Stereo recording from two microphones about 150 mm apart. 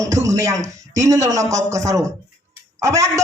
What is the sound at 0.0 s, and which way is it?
A man's voice, 20° right (ahead or behind).